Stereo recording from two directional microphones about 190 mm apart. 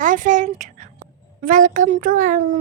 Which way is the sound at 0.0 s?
45° right (ahead or behind).